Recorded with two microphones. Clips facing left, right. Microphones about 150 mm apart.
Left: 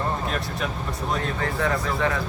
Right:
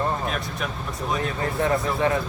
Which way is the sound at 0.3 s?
Centre (ahead or behind).